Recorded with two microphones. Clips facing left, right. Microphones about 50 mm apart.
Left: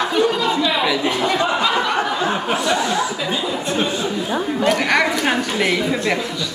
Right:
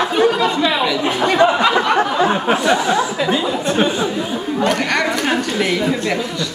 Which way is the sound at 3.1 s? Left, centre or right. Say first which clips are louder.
Right 5 dB; right.